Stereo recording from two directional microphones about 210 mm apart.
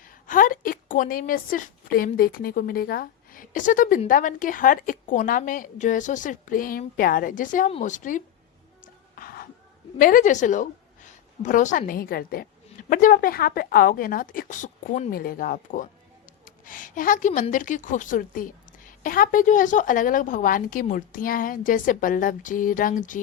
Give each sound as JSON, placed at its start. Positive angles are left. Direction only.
{"t": 0.0, "sound": "a woman's voice", "side_deg": 40}
{"t": 8.8, "sound": "gasp", "side_deg": 40}
{"t": 10.0, "sound": "a woman's voice", "side_deg": 40}